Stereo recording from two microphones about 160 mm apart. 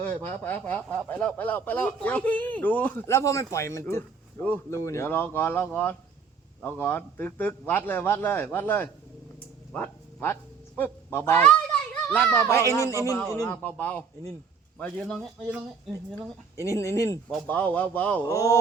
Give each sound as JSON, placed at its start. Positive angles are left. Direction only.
{"t": 0.0, "sound": "a child's voice", "side_deg": 10}
{"t": 15.4, "sound": "speech", "side_deg": -10}
{"t": 16.6, "sound": "speech", "side_deg": 20}
{"t": 18.3, "sound": "speech", "side_deg": 20}